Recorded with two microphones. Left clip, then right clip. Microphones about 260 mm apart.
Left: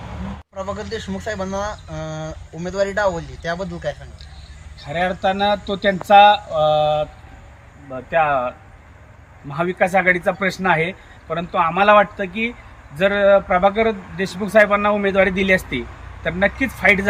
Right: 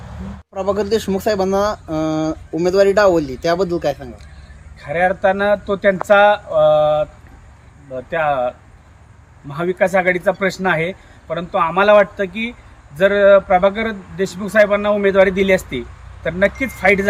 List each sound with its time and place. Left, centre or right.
0.5 s speech: right
4.9 s speech: centre
8.1 s a man's voice: centre